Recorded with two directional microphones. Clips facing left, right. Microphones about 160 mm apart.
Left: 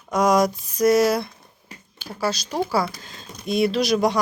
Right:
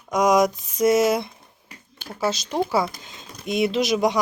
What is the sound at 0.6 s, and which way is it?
Speech, 25° right (ahead or behind).